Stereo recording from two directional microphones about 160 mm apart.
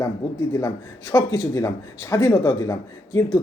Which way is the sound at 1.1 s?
20° left (ahead or behind).